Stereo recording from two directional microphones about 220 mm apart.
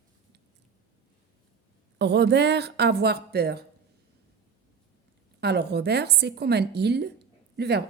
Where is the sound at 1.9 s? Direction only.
50° right (ahead or behind).